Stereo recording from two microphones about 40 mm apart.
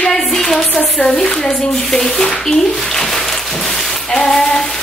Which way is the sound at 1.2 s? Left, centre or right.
Centre.